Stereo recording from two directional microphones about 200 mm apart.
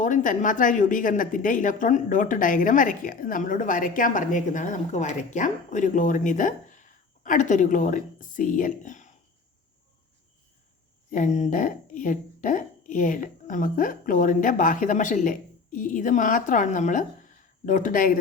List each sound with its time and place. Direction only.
0.0 s speech: 40° left (ahead or behind)
11.1 s a woman's voice: 40° left (ahead or behind)